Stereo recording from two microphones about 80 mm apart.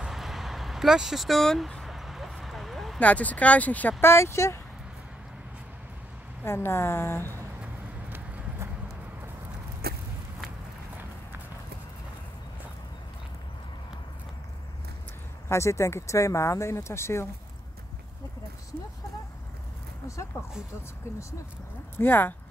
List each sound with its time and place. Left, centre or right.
0.0 s vehicle: centre
3.0 s speech: centre; by 4.6 s left
6.4 s speech: left
15.4 s speech: left
21.9 s speech: left